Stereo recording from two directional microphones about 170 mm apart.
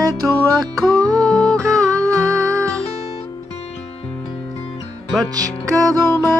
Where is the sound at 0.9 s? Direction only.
20° right (ahead or behind).